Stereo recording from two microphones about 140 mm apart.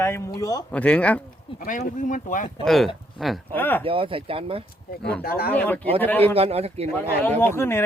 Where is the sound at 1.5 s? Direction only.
70° left (ahead or behind).